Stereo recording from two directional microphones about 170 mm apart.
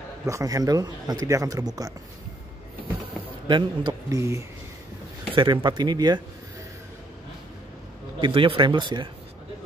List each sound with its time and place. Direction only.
0.3 s speech: 20° right (ahead or behind)
3.4 s a man's voice: 25° right (ahead or behind)
5.3 s speech: 30° right (ahead or behind)
8.2 s speech: 30° right (ahead or behind)